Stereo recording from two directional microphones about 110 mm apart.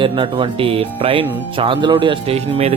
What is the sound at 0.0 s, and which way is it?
Speech, 50° right (ahead or behind).